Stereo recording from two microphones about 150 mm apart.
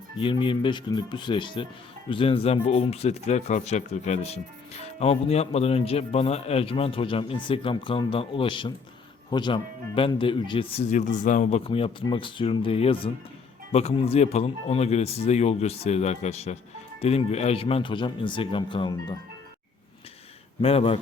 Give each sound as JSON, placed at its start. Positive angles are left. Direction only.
{"t": 0.2, "sound": "speech", "side_deg": 35}
{"t": 11.6, "sound": "speech", "side_deg": 35}
{"t": 20.6, "sound": "speech", "side_deg": 40}